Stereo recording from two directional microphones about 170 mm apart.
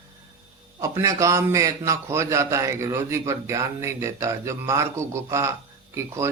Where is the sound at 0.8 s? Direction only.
20° right (ahead or behind).